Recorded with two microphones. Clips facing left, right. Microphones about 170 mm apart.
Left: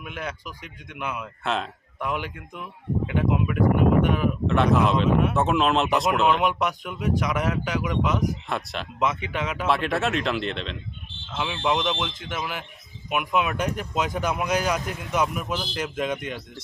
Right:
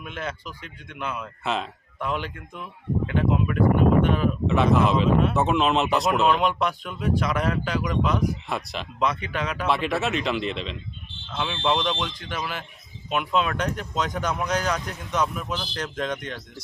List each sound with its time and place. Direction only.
0.0 s speech: 10° left (ahead or behind)
1.5 s speech: centre (ahead or behind)
2.0 s speech: 15° left (ahead or behind)
4.4 s speech: centre (ahead or behind)
6.4 s speech: 15° left (ahead or behind)
8.4 s speech: centre (ahead or behind)
9.0 s speech: 20° left (ahead or behind)
9.6 s speech: centre (ahead or behind)